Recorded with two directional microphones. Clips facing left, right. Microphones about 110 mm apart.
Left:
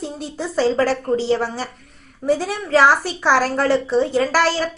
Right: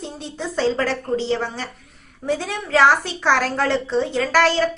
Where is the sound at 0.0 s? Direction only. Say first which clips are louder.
Left 3 dB; 5° left (ahead or behind).